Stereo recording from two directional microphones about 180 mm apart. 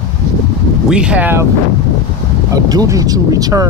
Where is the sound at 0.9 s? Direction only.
5° right (ahead or behind).